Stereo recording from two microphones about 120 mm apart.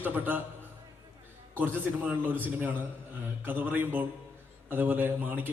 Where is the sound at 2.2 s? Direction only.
15° right (ahead or behind).